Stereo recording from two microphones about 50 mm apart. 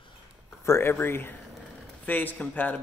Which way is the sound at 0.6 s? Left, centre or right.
Left.